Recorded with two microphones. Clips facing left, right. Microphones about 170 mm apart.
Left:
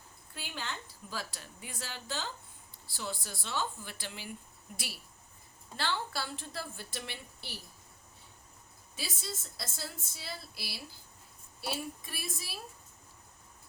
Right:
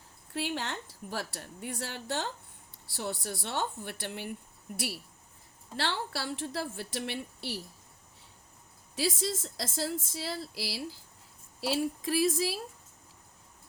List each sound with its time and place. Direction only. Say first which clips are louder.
0.3 s a woman's voice: right 8 dB; 75° right (ahead or behind)
5.7 s a woman's voice: right 2 dB; 75° right (ahead or behind)
9.0 s a woman's voice: right 11 dB; 90° right